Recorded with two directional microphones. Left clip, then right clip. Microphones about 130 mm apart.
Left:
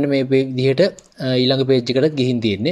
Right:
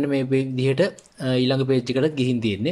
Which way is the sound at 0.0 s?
25° left (ahead or behind).